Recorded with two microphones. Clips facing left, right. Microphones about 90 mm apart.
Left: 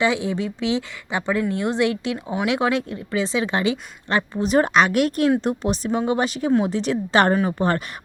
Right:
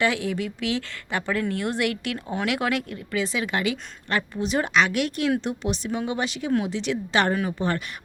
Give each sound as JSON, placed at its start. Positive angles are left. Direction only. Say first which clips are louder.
{"t": 0.0, "sound": "speech", "louder": "left 3 dB", "side_deg": 20}
{"t": 2.5, "sound": "a woman's voice", "louder": "left 5 dB", "side_deg": 25}